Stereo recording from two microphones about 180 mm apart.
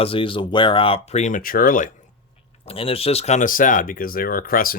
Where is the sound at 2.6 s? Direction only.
30° left (ahead or behind).